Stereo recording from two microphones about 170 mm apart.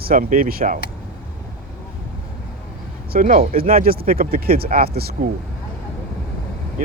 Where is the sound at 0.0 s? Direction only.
55° right (ahead or behind).